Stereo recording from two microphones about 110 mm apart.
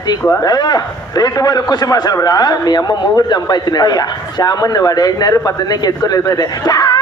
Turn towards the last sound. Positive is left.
turn(degrees=35)  # may be behind; listen again after turning